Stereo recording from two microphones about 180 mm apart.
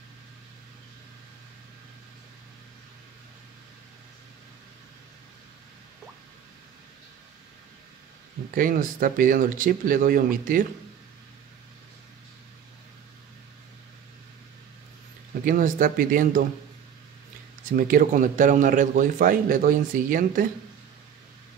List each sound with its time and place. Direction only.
8.5 s speech: 50° right (ahead or behind)
15.4 s speech: 50° right (ahead or behind)
17.6 s speech: 50° right (ahead or behind)